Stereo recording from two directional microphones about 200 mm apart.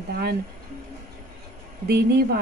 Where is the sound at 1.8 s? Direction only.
55° right (ahead or behind).